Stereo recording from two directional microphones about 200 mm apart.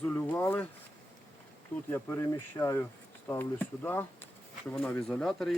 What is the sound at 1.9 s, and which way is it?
Speech, 10° left (ahead or behind).